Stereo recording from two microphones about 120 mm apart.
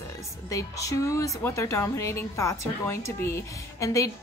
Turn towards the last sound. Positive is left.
turn(degrees=25)  # may be behind; listen again after turning